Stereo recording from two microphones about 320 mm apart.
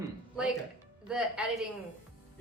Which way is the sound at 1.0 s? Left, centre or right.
Centre.